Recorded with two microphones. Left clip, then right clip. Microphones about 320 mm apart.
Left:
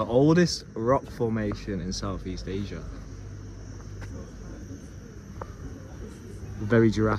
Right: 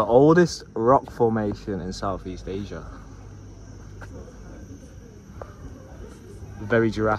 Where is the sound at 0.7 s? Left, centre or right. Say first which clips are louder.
Right 7 dB; right.